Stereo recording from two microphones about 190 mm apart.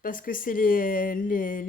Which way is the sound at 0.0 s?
45° left (ahead or behind).